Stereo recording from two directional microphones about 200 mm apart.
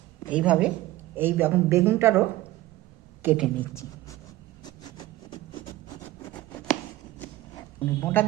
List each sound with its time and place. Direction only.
0.3 s speech: 5° right (ahead or behind)
3.2 s speech: 5° right (ahead or behind)
3.6 s speech: 15° left (ahead or behind)
4.6 s vehicle: 20° left (ahead or behind)
6.1 s a sound: 15° left (ahead or behind)
7.9 s speech: 10° left (ahead or behind)